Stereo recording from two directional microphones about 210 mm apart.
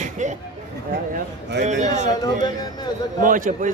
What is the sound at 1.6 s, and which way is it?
Speech, 35° right (ahead or behind).